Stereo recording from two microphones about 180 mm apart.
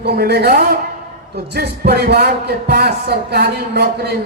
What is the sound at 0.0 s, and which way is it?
Speech, 65° right (ahead or behind).